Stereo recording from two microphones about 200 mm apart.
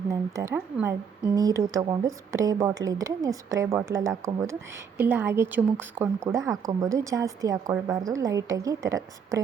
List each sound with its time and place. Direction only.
0.1 s a woman's voice: 15° right (ahead or behind)